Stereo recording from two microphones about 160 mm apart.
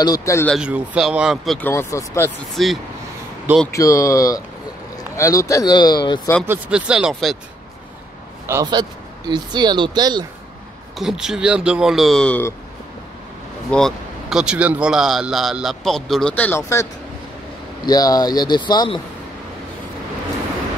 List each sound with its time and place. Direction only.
0.0 s speech: 20° left (ahead or behind)
0.6 s speech: 5° right (ahead or behind)
1.6 s speech: 15° left (ahead or behind)
2.5 s speech: centre (ahead or behind)
3.7 s speech: 20° left (ahead or behind)
6.4 s speech: 10° right (ahead or behind)
9.3 s speech: 25° right (ahead or behind)
11.0 s speech: 5° right (ahead or behind)
13.7 s speech: 5° left (ahead or behind)
17.8 s speech: 25° left (ahead or behind)